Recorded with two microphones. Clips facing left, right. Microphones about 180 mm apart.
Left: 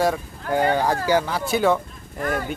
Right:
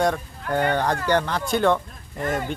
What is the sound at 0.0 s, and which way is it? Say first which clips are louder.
Speech: left 1 dB; 5° left (ahead or behind).